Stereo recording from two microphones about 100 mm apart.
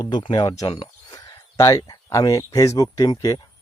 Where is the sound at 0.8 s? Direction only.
40° left (ahead or behind).